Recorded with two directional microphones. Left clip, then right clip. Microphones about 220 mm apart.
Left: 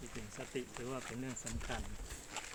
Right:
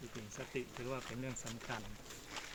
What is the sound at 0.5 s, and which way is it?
Speech, 5° right (ahead or behind).